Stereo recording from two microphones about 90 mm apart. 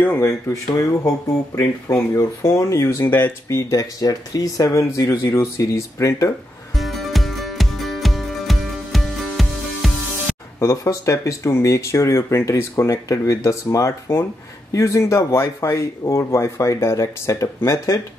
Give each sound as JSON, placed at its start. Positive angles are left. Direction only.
{"t": 0.0, "sound": "speech", "side_deg": 25}
{"t": 6.7, "sound": "music", "side_deg": 0}
{"t": 10.6, "sound": "speech", "side_deg": 35}